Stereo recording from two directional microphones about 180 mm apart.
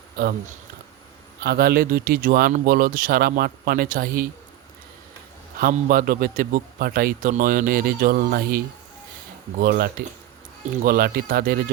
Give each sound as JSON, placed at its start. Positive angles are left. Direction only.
{"t": 1.5, "sound": "a man's voice", "side_deg": -55}
{"t": 5.5, "sound": "a man's voice", "side_deg": -50}